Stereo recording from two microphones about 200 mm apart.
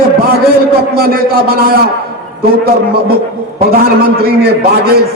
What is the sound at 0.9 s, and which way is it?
Speech, 50° right (ahead or behind).